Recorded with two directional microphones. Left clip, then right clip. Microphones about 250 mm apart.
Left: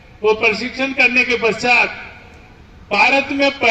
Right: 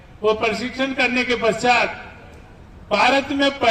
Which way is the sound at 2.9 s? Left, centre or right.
Right.